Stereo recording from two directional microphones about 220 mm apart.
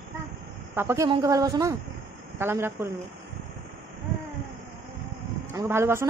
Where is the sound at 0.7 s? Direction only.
10° right (ahead or behind).